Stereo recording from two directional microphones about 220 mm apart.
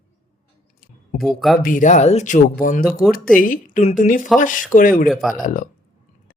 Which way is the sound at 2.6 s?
40° left (ahead or behind).